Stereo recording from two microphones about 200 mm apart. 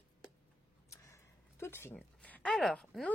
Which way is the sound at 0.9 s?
15° left (ahead or behind).